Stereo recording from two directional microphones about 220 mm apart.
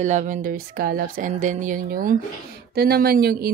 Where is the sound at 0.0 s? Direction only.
35° right (ahead or behind).